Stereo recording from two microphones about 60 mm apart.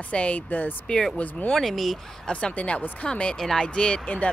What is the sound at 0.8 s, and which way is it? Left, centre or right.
Speech, centre.